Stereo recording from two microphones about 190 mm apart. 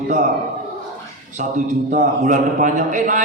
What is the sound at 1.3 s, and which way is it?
A man's voice, 40° right (ahead or behind).